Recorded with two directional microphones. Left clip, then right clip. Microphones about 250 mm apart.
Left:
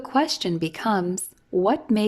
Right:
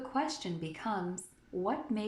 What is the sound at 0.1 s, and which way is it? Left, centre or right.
A woman's voice, left.